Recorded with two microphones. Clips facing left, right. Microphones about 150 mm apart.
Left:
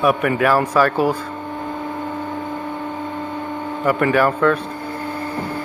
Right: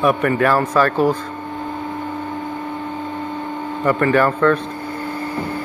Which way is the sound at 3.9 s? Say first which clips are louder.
Right 1 dB; 10° left (ahead or behind).